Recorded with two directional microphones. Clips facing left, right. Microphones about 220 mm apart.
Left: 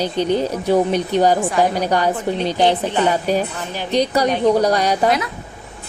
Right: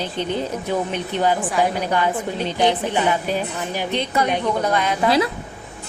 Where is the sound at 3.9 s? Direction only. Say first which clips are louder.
Left 6 dB; 40° left (ahead or behind).